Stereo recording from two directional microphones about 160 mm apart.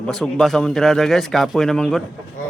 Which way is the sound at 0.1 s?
Centre (ahead or behind).